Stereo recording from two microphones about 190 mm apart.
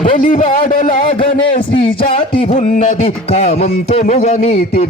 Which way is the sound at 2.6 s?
40° left (ahead or behind).